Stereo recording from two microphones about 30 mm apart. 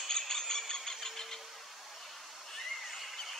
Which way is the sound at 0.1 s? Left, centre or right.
Left.